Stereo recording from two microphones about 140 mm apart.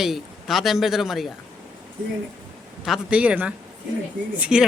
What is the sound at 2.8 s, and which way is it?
Speech, 5° right (ahead or behind).